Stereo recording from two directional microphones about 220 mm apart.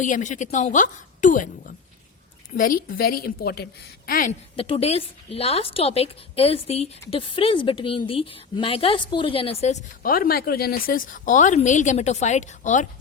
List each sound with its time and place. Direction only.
0.0 s a woman's voice: 35° left (ahead or behind)
4.5 s a woman's voice: 25° left (ahead or behind)